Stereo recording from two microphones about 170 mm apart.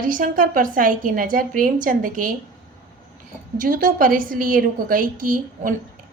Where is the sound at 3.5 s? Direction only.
55° right (ahead or behind).